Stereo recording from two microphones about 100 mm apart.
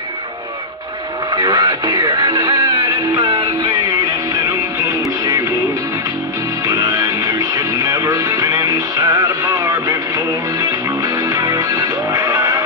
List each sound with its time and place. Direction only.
1.3 s music: 45° right (ahead or behind)
6.7 s music: 45° right (ahead or behind)